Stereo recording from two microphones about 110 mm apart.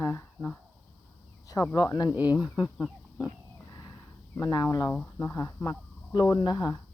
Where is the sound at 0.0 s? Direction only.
25° left (ahead or behind).